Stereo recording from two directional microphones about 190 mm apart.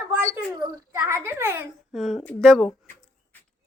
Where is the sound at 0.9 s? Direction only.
15° right (ahead or behind).